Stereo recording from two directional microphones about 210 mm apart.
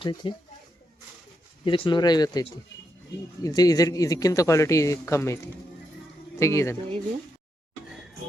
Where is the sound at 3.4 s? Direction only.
20° left (ahead or behind).